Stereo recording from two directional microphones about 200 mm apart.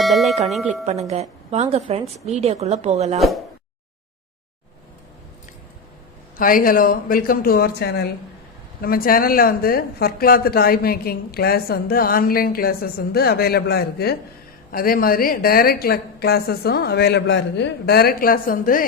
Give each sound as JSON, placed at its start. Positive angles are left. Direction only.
{"t": 0.0, "sound": "speech", "side_deg": 0}
{"t": 0.9, "sound": "speech", "side_deg": -35}
{"t": 3.2, "sound": "speech", "side_deg": 0}
{"t": 6.3, "sound": "speech", "side_deg": 45}